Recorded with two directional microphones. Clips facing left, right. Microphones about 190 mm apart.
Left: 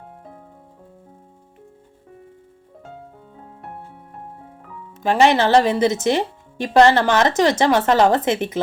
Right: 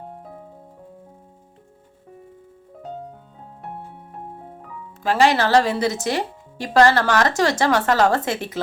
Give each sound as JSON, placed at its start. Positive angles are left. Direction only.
{"t": 5.0, "sound": "speech", "side_deg": 20}